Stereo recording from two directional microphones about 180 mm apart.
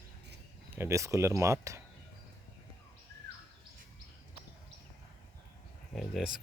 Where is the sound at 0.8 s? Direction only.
15° right (ahead or behind).